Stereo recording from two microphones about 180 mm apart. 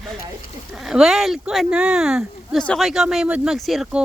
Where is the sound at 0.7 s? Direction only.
Centre (ahead or behind).